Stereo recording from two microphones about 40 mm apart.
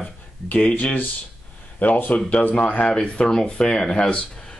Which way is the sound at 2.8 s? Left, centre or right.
Left.